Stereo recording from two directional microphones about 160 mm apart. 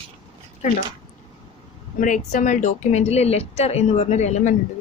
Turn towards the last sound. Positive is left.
turn(degrees=45)  # may be behind; listen again after turning